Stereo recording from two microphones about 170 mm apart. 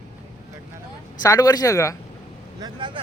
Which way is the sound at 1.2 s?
20° left (ahead or behind).